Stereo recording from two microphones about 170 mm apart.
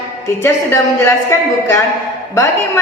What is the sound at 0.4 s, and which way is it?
A man's voice, 15° left (ahead or behind).